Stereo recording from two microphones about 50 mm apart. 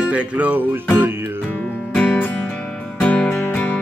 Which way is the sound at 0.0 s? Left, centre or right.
Right.